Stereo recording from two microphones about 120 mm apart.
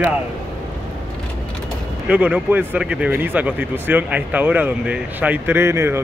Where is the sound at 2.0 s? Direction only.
10° right (ahead or behind).